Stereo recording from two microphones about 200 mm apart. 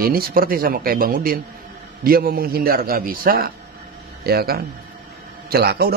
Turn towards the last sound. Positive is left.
turn(degrees=-50)  # may be behind; listen again after turning